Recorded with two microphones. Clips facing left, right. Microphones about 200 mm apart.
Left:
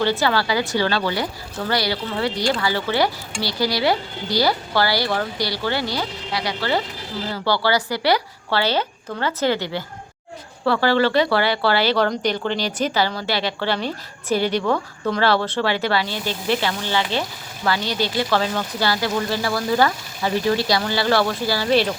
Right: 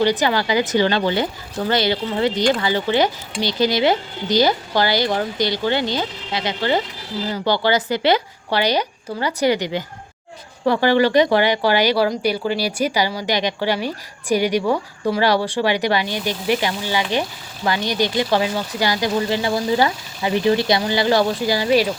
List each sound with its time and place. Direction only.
0.0 s speech: 15° right (ahead or behind)